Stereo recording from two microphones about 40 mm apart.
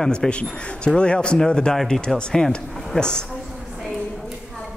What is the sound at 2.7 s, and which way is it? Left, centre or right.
Speech, centre.